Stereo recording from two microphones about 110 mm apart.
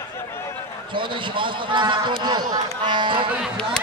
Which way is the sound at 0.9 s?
50° right (ahead or behind).